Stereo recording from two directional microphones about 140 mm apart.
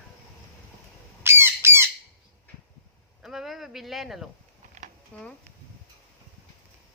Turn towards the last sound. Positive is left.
turn(degrees=10)  # may be behind; listen again after turning